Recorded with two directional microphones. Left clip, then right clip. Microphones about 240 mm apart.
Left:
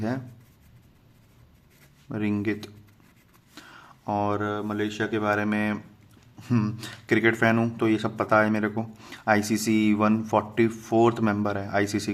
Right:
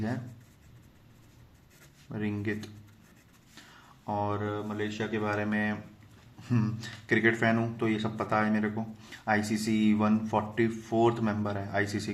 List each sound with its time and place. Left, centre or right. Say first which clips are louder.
2.0 s speech: left 6 dB; left